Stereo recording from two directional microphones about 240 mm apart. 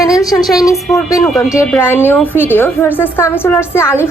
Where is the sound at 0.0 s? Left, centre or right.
Centre.